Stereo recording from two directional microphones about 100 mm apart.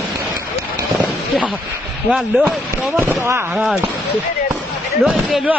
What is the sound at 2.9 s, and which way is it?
Speech, 20° right (ahead or behind).